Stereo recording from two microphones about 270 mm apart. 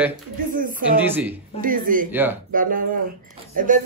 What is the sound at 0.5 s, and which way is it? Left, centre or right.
Speech, right.